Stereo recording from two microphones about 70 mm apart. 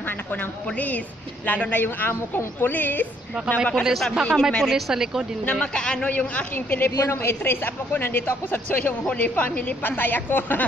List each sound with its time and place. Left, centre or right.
0.7 s a woman's voice: left
3.8 s a man's voice: centre
4.7 s speech: centre
5.4 s a woman's voice: centre
6.5 s a woman's voice: left